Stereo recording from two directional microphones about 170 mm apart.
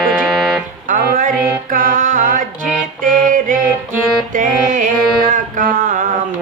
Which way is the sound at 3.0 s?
50° right (ahead or behind).